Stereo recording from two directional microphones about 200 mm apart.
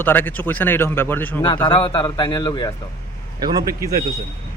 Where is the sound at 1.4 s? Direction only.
20° left (ahead or behind).